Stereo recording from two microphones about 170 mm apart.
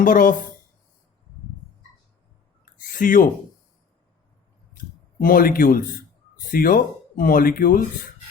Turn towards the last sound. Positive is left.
turn(degrees=55)  # may be behind; listen again after turning